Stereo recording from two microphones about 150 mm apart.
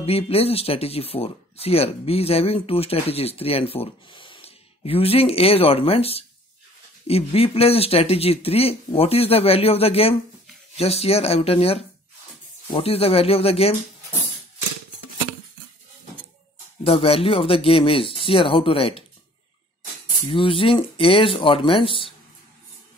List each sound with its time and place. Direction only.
0.0 s speech: 40° left (ahead or behind)
16.8 s speech: 40° left (ahead or behind)
20.2 s speech: 35° left (ahead or behind)